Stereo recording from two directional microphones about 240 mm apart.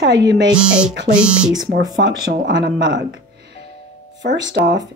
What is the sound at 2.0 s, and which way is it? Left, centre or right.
Speech, right.